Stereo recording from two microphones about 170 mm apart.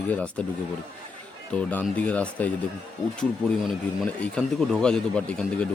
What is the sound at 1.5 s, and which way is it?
Speech, 5° left (ahead or behind).